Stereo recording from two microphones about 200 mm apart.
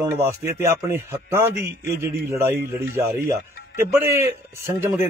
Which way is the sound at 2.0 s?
15° right (ahead or behind).